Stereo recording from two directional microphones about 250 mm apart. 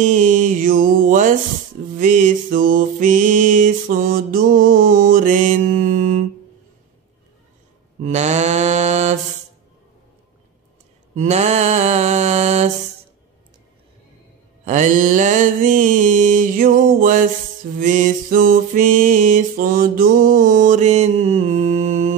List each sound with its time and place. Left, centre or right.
0.0 s mantra: right
2.0 s music: right
8.0 s mantra: right
11.1 s mantra: right
14.6 s music: right